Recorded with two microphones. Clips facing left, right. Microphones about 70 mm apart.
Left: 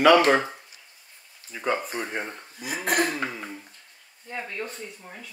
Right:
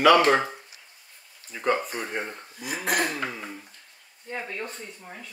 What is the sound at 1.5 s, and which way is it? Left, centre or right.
Speech, centre.